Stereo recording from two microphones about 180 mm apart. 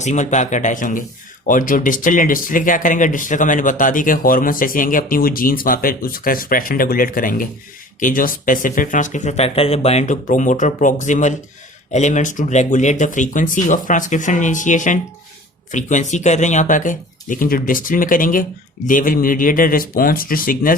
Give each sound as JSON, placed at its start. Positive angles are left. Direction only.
{"t": 0.0, "sound": "speech", "side_deg": 40}